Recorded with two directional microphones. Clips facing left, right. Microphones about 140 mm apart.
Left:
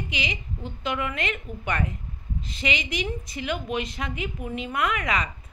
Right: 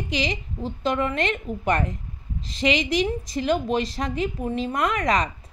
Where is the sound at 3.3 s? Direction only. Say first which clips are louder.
Right 7 dB; 35° right (ahead or behind).